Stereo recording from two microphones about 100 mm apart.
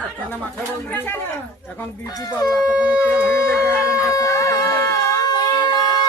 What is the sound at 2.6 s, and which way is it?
Speech, 10° right (ahead or behind).